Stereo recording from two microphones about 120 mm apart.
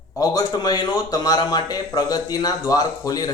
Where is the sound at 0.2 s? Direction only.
35° left (ahead or behind).